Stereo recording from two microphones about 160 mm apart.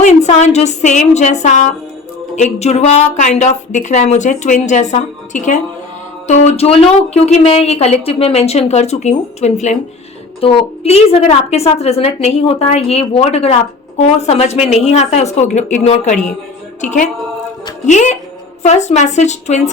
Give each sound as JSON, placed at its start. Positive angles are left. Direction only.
{"t": 0.0, "sound": "a woman's voice", "side_deg": 45}